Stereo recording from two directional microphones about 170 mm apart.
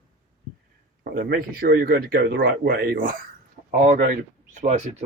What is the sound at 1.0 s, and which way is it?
Speech, 60° right (ahead or behind).